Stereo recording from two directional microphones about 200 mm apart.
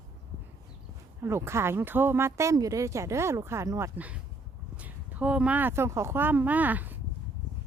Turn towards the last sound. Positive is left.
turn(degrees=-10)  # may be behind; listen again after turning